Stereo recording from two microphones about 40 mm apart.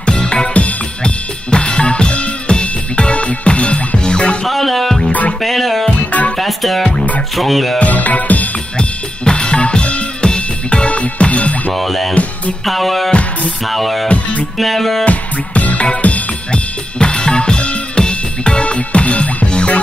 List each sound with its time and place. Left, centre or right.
0.0 s music: left
1.0 s drum kit: left
4.5 s music: centre
7.8 s music: left
8.7 s drum kit: left
10.2 s music: left
11.7 s music: centre
12.1 s music: left
12.6 s music: centre
14.0 s music: left
14.6 s music: centre
15.0 s music: left